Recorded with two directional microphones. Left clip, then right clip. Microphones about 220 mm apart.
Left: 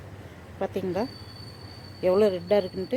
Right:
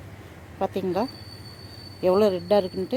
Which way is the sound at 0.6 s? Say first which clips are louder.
Right 3 dB; 10° right (ahead or behind).